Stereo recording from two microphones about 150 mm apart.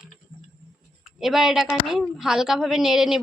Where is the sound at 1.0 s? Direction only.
Centre (ahead or behind).